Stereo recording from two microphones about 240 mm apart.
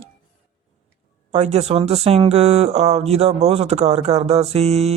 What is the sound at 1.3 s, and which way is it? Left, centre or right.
Speech, right.